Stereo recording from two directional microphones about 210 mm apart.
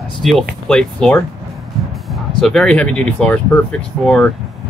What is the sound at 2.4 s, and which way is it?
Speech, 5° left (ahead or behind).